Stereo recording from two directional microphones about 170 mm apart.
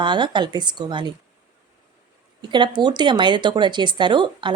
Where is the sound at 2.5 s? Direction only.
25° right (ahead or behind).